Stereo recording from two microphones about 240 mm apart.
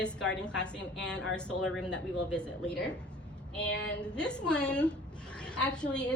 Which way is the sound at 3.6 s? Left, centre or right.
Left.